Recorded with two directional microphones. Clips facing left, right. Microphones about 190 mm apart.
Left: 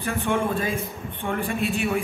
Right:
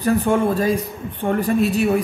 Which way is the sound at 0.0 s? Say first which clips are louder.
Right 7 dB; 40° right (ahead or behind).